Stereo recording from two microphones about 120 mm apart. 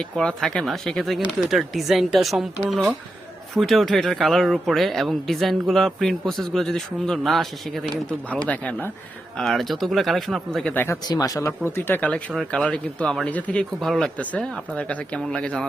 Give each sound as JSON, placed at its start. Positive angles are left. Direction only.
{"t": 0.0, "sound": "speech", "side_deg": 5}
{"t": 8.4, "sound": "speech", "side_deg": 10}
{"t": 9.4, "sound": "speech", "side_deg": 0}
{"t": 11.0, "sound": "speech", "side_deg": 35}